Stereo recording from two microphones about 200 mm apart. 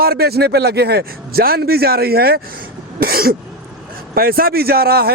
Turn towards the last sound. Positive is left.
turn(degrees=-50)  # may be behind; listen again after turning